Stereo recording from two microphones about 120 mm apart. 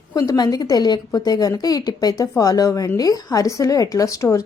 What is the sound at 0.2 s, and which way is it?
Speech, 35° left (ahead or behind).